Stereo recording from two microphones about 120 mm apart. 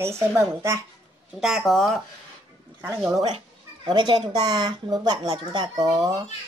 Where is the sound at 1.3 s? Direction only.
Centre (ahead or behind).